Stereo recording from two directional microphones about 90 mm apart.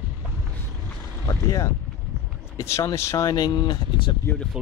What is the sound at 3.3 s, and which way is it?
Speech, 45° left (ahead or behind).